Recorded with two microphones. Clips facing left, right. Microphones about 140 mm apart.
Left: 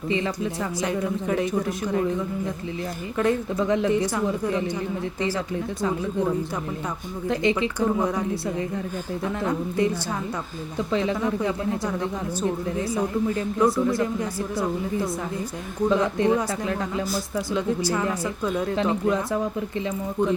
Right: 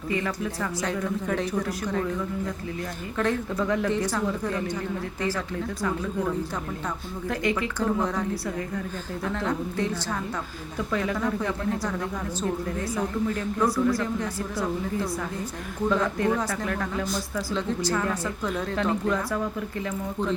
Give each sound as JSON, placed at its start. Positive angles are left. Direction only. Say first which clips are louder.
{"t": 0.1, "sound": "a woman's voice", "louder": "left 2 dB", "side_deg": 20}
{"t": 3.2, "sound": "speech", "louder": "left 3 dB", "side_deg": 15}
{"t": 7.3, "sound": "a woman's voice", "louder": "left 4 dB", "side_deg": 20}
{"t": 14.2, "sound": "a woman's voice", "louder": "left 3 dB", "side_deg": 15}